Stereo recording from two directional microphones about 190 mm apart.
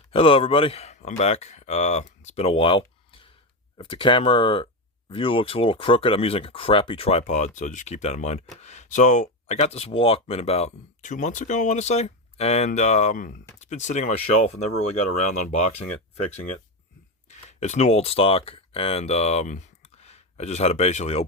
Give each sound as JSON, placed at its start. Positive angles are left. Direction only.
{"t": 0.1, "sound": "speech", "side_deg": 30}
{"t": 17.2, "sound": "speech", "side_deg": 35}